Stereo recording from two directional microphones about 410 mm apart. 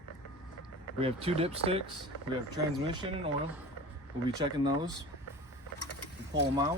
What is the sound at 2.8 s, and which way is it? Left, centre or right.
Speech, centre.